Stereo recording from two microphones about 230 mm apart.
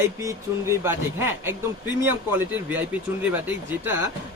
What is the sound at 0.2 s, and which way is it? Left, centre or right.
Speech, centre.